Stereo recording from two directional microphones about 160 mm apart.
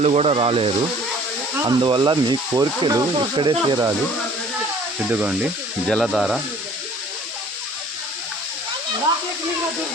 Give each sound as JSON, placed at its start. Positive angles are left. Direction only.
{"t": 0.0, "sound": "speech", "side_deg": -40}
{"t": 5.0, "sound": "speech", "side_deg": -10}